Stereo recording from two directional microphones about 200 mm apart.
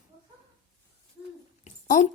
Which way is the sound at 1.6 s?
35° left (ahead or behind).